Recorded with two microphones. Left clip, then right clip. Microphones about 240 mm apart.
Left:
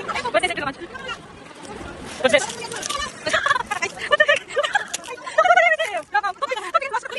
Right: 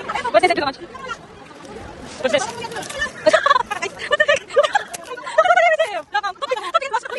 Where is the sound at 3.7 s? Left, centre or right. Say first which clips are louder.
Even; centre.